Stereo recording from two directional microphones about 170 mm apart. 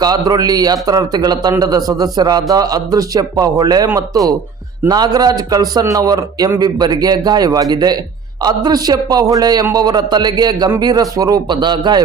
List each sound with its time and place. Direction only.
0.0 s speech: 25° right (ahead or behind)